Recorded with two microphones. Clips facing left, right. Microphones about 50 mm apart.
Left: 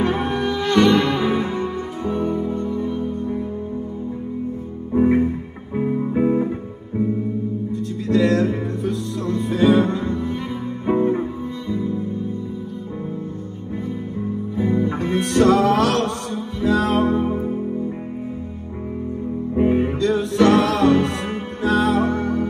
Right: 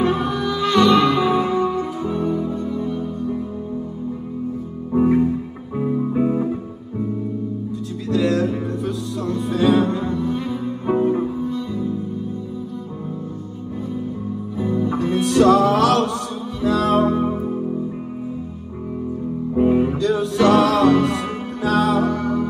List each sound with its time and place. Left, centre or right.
0.0 s music: left
4.9 s music: left
5.8 s music: left
6.2 s music: left
7.7 s music: left
14.6 s music: left
19.6 s music: left